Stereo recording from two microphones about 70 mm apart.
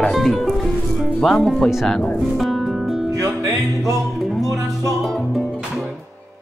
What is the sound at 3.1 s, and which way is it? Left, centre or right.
Music, right.